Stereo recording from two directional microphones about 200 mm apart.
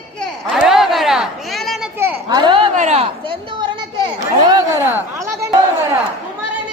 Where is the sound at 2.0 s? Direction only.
15° right (ahead or behind).